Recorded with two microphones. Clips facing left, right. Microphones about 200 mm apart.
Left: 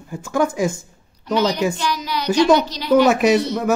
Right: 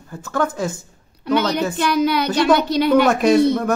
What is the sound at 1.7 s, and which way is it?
A woman's voice, 60° right (ahead or behind).